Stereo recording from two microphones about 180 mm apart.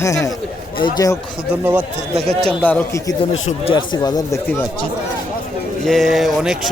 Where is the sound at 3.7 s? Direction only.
25° left (ahead or behind).